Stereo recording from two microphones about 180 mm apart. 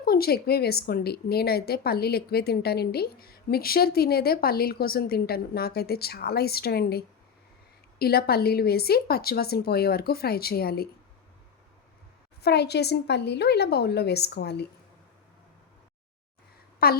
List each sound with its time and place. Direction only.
0.0 s a woman's voice: 55° left (ahead or behind)
12.4 s a woman's voice: 65° left (ahead or behind)
16.8 s a woman's voice: 60° left (ahead or behind)